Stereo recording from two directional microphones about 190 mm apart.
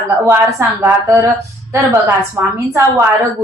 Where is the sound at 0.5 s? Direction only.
15° right (ahead or behind).